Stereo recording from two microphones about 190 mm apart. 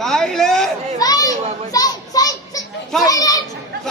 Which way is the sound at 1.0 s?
20° left (ahead or behind).